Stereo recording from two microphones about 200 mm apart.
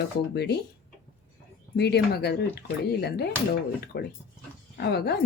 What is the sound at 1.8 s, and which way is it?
A woman's voice, 55° left (ahead or behind).